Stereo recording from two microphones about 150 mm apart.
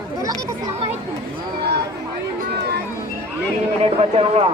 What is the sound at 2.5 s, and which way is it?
Chatter, 90° right.